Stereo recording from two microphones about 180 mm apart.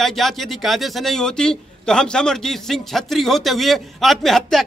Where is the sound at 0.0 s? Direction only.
Centre (ahead or behind).